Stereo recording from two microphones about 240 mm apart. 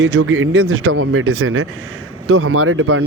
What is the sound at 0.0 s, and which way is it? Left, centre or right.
Speech, right.